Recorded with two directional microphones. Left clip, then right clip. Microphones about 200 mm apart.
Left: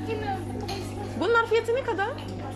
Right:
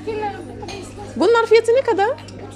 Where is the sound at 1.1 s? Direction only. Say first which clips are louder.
Right 9 dB; 25° right (ahead or behind).